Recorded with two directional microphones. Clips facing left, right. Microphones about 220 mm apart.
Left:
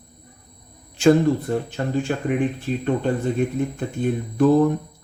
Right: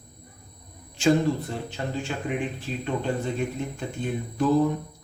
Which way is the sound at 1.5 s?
50° left (ahead or behind).